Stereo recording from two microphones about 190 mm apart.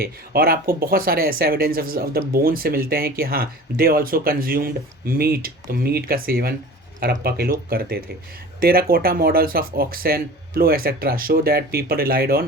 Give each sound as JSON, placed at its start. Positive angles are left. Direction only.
{"t": 0.0, "sound": "speech", "side_deg": -50}